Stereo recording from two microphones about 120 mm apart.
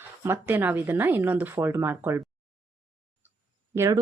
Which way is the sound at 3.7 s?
20° right (ahead or behind).